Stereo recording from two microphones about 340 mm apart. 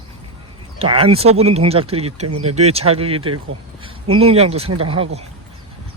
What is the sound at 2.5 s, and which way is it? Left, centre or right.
Speech, centre.